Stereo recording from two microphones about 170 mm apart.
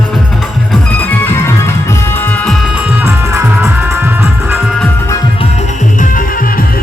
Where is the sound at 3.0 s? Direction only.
15° right (ahead or behind).